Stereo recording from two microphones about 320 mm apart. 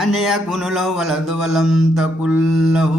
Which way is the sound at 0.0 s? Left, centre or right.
Centre.